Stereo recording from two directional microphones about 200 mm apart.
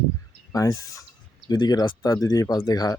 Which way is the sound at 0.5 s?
15° left (ahead or behind).